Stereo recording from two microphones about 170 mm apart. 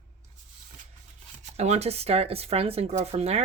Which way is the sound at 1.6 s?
40° right (ahead or behind).